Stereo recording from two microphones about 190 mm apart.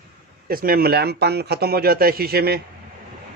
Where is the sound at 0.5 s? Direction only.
50° right (ahead or behind).